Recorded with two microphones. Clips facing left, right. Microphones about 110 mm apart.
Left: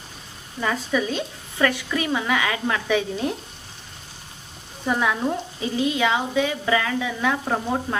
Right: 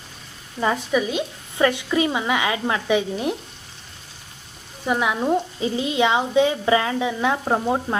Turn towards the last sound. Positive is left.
turn(degrees=-25)  # may be behind; listen again after turning